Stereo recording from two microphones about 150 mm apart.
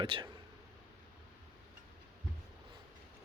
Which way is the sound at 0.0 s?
35° right (ahead or behind).